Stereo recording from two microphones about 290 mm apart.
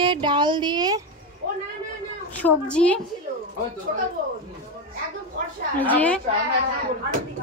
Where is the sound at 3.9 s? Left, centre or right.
Right.